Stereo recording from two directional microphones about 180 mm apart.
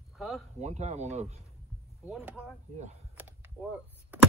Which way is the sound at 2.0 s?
10° right (ahead or behind).